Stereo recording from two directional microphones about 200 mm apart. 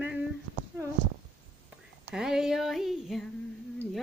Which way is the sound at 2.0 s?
5° right (ahead or behind).